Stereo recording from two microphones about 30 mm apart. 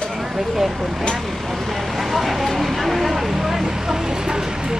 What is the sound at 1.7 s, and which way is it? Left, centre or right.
Vehicle, centre.